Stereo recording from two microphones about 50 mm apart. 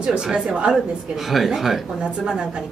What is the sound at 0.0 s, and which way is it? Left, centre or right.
Speech, centre.